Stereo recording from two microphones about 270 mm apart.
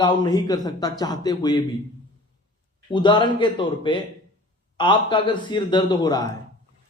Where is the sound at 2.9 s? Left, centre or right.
Centre.